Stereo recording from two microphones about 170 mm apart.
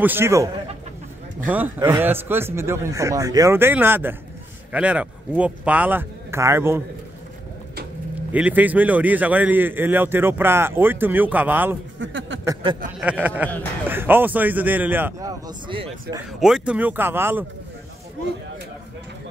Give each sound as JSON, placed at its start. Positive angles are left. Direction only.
{"t": 0.0, "sound": "a man's voice", "side_deg": -15}
{"t": 8.3, "sound": "a man's voice", "side_deg": -10}
{"t": 12.0, "sound": "speech", "side_deg": -90}
{"t": 13.0, "sound": "a man's voice", "side_deg": -10}
{"t": 16.3, "sound": "a man's voice", "side_deg": -5}